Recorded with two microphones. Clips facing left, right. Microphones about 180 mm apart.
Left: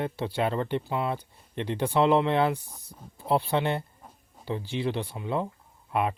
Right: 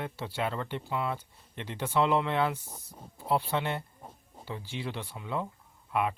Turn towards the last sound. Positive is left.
turn(degrees=30)  # may be behind; listen again after turning